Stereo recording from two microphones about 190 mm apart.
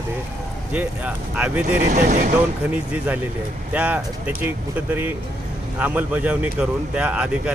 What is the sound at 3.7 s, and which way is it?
Speech, 5° right (ahead or behind).